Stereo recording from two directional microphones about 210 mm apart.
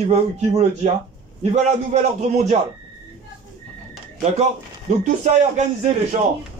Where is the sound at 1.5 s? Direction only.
35° right (ahead or behind).